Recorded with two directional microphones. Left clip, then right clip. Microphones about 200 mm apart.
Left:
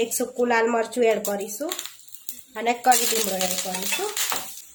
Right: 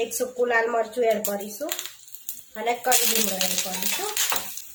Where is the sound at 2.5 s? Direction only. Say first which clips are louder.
Left 5 dB; 45° left (ahead or behind).